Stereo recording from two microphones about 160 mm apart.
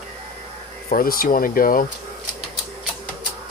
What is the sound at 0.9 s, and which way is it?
Speech, 65° left (ahead or behind).